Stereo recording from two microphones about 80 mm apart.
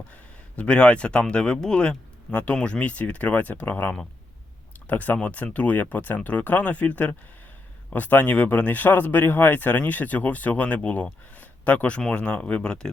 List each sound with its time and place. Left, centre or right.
0.1 s speech: centre